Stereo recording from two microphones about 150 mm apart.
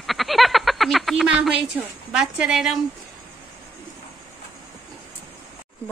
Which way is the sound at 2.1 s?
5° right (ahead or behind).